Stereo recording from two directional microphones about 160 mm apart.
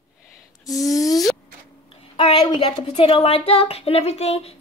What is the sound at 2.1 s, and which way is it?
Speech, 30° left (ahead or behind).